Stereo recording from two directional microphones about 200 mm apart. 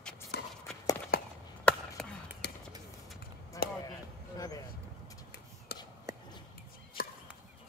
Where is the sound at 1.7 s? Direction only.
5° left (ahead or behind).